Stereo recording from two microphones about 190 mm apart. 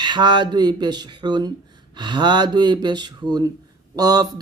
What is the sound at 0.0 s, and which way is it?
Speech, 25° right (ahead or behind).